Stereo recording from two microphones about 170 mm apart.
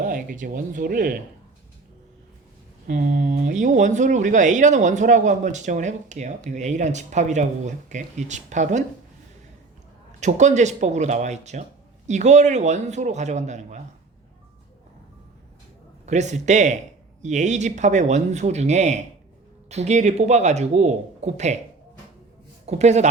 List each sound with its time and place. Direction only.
0.0 s speech: 55° right (ahead or behind)
2.8 s speech: 55° right (ahead or behind)
10.2 s speech: 45° right (ahead or behind)
16.0 s speech: 45° right (ahead or behind)
22.6 s speech: 40° right (ahead or behind)